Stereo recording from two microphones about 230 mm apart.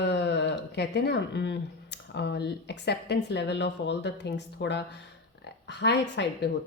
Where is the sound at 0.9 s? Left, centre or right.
Left.